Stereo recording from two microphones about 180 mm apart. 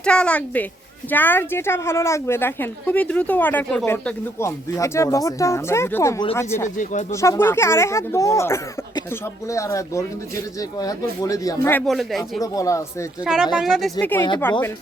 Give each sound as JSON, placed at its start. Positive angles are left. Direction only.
{"t": 0.0, "sound": "a woman's voice", "side_deg": 5}
{"t": 11.9, "sound": "speech", "side_deg": 0}
{"t": 12.4, "sound": "speech", "side_deg": 20}
{"t": 13.2, "sound": "speech", "side_deg": -5}
{"t": 14.0, "sound": "a woman's voice", "side_deg": 10}